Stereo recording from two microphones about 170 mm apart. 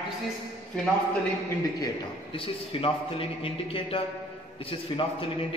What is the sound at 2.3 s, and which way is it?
A man's voice, 35° left (ahead or behind).